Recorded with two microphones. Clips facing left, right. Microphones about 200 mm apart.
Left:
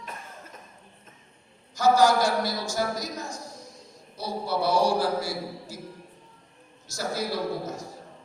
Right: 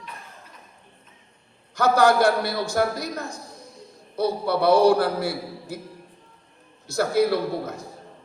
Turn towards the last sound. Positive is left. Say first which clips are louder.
# right 3 dB
turn(degrees=-60)  # may be behind; listen again after turning